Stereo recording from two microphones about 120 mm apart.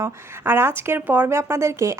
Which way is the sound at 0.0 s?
20° right (ahead or behind).